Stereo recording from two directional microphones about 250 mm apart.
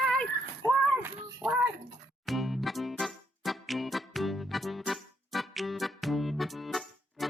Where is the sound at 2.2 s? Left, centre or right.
Centre.